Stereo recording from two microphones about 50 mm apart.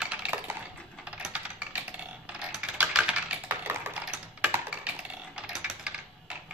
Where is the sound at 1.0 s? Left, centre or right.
Right.